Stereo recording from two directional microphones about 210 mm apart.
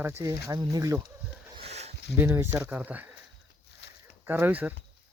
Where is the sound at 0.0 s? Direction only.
10° right (ahead or behind).